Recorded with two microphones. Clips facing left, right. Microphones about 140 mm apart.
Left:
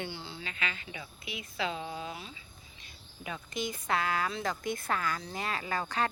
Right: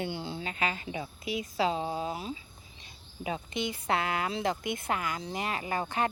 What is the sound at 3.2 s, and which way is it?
Speech, 25° right (ahead or behind).